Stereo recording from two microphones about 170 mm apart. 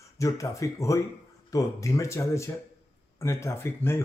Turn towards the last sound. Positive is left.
turn(degrees=15)  # may be behind; listen again after turning